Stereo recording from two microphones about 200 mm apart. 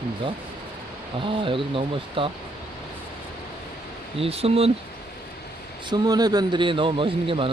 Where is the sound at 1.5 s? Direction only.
25° right (ahead or behind).